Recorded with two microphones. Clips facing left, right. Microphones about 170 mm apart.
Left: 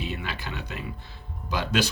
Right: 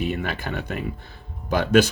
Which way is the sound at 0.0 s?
50° right (ahead or behind).